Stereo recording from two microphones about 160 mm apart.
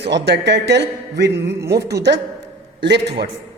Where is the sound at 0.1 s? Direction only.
90° right.